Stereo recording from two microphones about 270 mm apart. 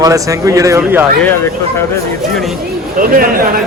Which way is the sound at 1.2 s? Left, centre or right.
Centre.